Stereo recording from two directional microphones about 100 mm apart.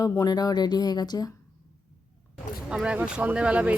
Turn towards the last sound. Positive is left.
turn(degrees=-10)  # may be behind; listen again after turning